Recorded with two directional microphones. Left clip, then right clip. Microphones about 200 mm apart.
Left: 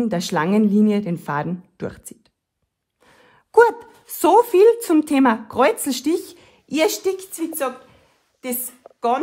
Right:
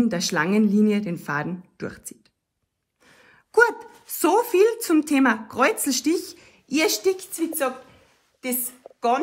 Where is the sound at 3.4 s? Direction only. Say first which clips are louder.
Left 4 dB; 40° left (ahead or behind).